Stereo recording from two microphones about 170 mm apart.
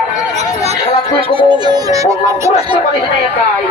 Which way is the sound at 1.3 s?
25° right (ahead or behind).